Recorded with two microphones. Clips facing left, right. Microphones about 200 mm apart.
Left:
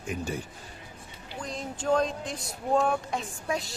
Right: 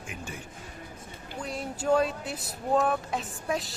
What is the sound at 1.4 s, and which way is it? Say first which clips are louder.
Speech: right 1 dB; 10° right (ahead or behind).